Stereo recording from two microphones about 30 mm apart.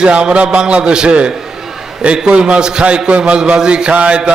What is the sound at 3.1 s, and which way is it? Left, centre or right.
Speech, right.